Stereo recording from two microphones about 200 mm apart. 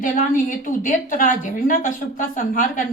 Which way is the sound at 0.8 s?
40° left (ahead or behind).